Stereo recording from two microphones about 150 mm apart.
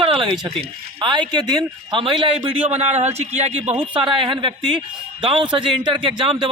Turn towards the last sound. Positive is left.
turn(degrees=-35)  # may be behind; listen again after turning